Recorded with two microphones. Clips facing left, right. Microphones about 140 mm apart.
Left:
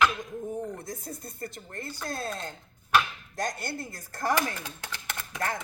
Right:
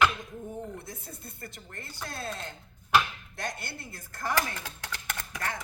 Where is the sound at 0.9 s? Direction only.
40° left (ahead or behind).